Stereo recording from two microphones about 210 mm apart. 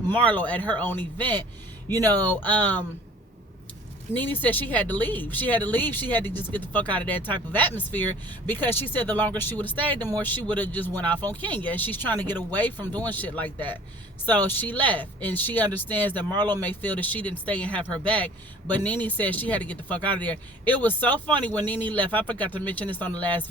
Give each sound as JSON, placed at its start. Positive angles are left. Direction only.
{"t": 0.1, "sound": "speech", "side_deg": 5}
{"t": 4.1, "sound": "speech", "side_deg": 10}
{"t": 12.7, "sound": "speech", "side_deg": -20}
{"t": 13.1, "sound": "speech", "side_deg": 5}
{"t": 16.3, "sound": "speech", "side_deg": -20}
{"t": 16.6, "sound": "speech", "side_deg": 10}